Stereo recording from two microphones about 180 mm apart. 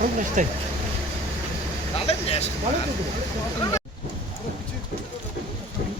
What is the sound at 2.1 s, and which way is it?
Speech, 35° left (ahead or behind).